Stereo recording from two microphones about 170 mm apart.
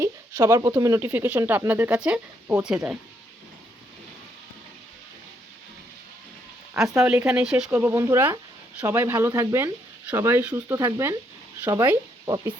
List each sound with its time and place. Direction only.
0.0 s speech: 20° right (ahead or behind)
6.8 s speech: 20° right (ahead or behind)
7.1 s speech: 5° right (ahead or behind)